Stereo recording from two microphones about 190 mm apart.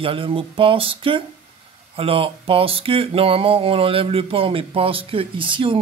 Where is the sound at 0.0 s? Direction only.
30° right (ahead or behind).